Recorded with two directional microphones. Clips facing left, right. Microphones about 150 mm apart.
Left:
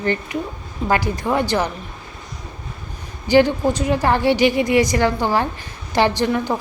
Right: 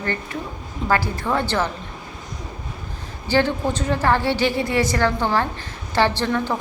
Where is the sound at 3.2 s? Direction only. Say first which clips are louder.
Left 5 dB; 15° left (ahead or behind).